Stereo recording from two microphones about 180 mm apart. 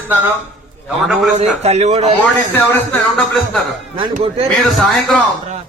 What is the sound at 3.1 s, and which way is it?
Speech, centre (ahead or behind).